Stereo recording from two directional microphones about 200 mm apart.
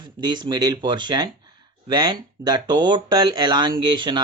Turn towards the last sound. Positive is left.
turn(degrees=-25)  # may be behind; listen again after turning